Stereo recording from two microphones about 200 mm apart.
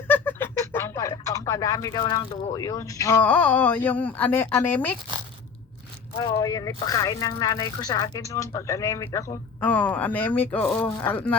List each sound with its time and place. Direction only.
0.1 s speech: 10° left (ahead or behind)
6.1 s speech: 20° left (ahead or behind)